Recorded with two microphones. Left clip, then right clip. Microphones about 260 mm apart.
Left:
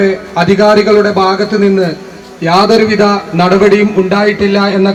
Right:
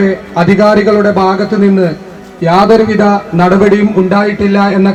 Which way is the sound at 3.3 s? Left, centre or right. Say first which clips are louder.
Left 2 dB; right.